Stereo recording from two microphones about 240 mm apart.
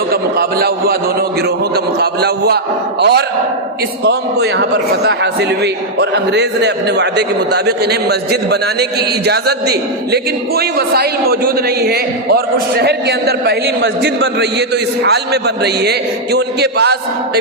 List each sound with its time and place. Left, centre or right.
0.1 s a man's voice: right